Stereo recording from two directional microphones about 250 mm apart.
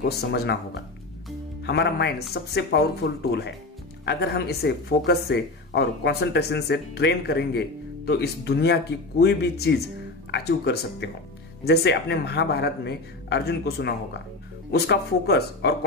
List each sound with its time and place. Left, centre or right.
0.0 s speech: left